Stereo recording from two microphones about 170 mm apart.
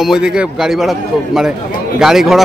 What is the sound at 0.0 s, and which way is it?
A man's voice, 5° right (ahead or behind).